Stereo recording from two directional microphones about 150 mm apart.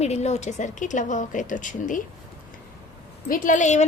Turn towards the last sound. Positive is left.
turn(degrees=50)  # may be behind; listen again after turning